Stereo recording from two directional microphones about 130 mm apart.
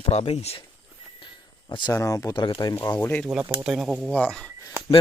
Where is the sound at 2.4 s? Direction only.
40° left (ahead or behind).